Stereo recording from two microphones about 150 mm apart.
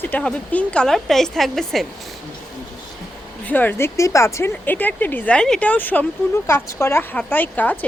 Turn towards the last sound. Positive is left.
turn(degrees=10)  # may be behind; listen again after turning